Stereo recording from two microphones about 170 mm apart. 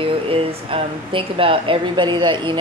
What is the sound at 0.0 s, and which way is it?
Speech, 35° right (ahead or behind).